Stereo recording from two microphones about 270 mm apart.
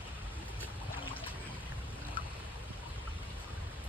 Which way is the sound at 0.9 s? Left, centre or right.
Centre.